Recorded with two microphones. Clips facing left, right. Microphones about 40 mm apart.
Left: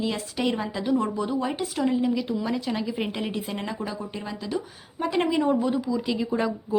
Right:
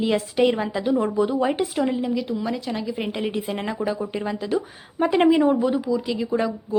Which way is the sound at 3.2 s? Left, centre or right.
Centre.